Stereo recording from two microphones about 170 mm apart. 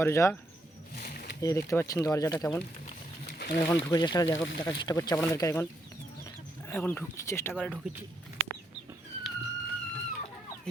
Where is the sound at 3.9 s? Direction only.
25° left (ahead or behind).